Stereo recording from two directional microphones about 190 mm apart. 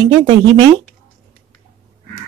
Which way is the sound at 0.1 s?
30° right (ahead or behind).